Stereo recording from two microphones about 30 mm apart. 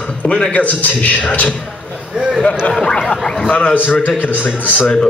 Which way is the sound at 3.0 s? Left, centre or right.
Centre.